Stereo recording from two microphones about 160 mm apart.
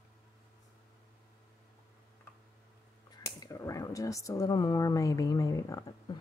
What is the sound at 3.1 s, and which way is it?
Speech, 25° left (ahead or behind).